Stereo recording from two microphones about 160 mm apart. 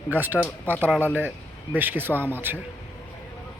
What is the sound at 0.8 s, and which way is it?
Speech, 10° right (ahead or behind).